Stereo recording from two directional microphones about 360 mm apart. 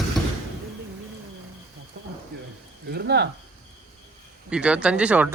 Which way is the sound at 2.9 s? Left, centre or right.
Right.